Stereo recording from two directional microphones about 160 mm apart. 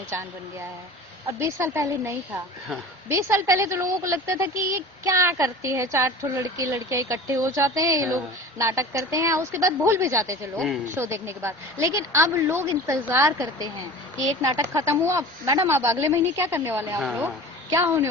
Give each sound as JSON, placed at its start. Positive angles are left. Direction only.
{"t": 1.4, "sound": "a woman's voice", "side_deg": -15}